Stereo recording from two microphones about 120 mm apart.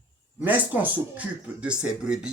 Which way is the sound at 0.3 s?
15° right (ahead or behind).